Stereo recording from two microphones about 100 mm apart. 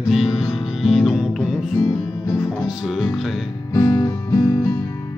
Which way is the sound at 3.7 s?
35° left (ahead or behind).